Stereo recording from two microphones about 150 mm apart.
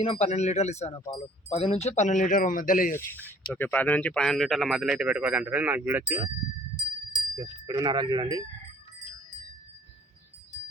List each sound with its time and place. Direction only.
0.0 s speech: 45° left (ahead or behind); by 2.9 s 65° left (ahead or behind)
2.9 s speech: 15° left (ahead or behind); by 6.3 s 10° right (ahead or behind)
7.3 s wind chime: 30° right (ahead or behind)